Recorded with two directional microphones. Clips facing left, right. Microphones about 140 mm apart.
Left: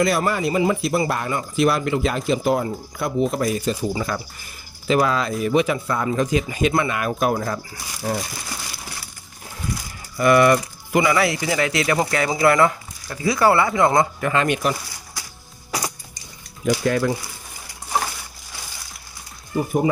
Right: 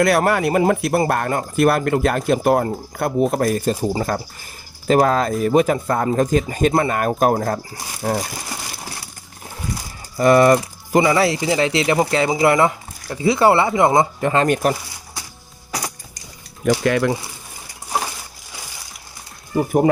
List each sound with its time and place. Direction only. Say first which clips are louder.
0.0 s speech: right 4 dB; 65° right (ahead or behind); by 8.3 s 45° right (ahead or behind)
10.2 s speech: right 3 dB; 35° right (ahead or behind)
14.4 s speech: right 4 dB; 45° right (ahead or behind)
16.6 s speech: right 3 dB; 80° right